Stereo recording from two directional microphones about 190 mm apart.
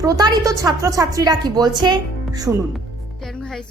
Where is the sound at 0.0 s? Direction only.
20° right (ahead or behind).